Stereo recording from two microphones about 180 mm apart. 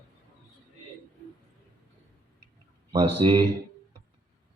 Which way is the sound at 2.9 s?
25° right (ahead or behind).